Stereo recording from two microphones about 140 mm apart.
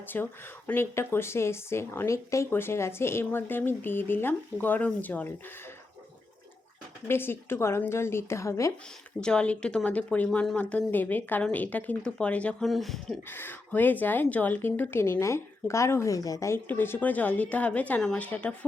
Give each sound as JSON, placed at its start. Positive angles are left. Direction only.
{"t": 0.1, "sound": "speech", "side_deg": 15}
{"t": 7.1, "sound": "speech", "side_deg": 15}
{"t": 9.2, "sound": "speech", "side_deg": 5}
{"t": 13.3, "sound": "speech", "side_deg": 15}